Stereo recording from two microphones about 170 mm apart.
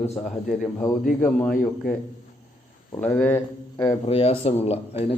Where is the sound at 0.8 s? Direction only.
20° left (ahead or behind).